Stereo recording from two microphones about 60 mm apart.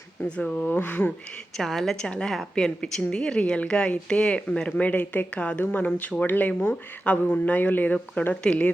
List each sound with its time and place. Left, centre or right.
0.3 s speech: left
1.5 s a woman's voice: centre
2.0 s a woman's voice: centre
2.3 s a woman's voice: centre; by 5.5 s left
5.5 s speech: left